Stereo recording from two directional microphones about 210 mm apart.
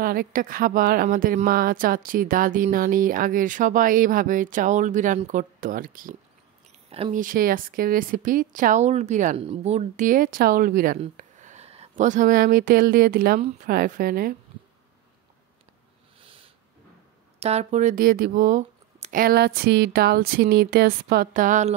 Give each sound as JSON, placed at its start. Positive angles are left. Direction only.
{"t": 0.0, "sound": "a woman's voice", "side_deg": -45}
{"t": 16.2, "sound": "a sound", "side_deg": -25}
{"t": 17.4, "sound": "speech", "side_deg": -30}